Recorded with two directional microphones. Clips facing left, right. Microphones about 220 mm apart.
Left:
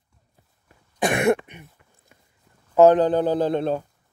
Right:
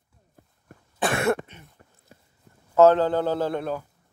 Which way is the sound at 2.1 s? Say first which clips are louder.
Right 6 dB; 35° right (ahead or behind).